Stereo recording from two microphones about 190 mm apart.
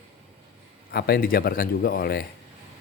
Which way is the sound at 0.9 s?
55° left (ahead or behind).